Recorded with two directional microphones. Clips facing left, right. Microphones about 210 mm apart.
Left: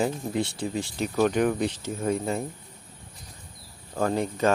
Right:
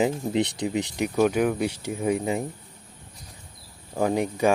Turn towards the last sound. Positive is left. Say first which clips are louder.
# right 2 dB
turn(degrees=-15)  # may be behind; listen again after turning